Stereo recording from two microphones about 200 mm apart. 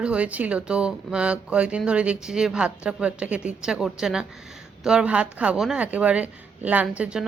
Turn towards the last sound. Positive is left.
turn(degrees=-5)  # may be behind; listen again after turning